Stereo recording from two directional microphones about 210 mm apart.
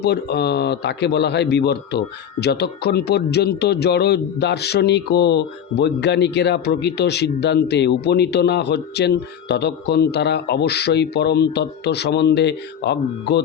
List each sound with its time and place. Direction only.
0.0 s a man's voice: 50° left (ahead or behind)